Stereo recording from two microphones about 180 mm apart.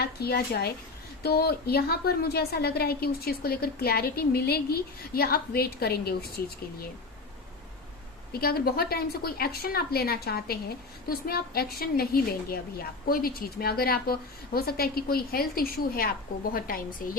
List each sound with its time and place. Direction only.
0.0 s a woman's voice: 60° left (ahead or behind)
8.3 s a woman's voice: 60° left (ahead or behind)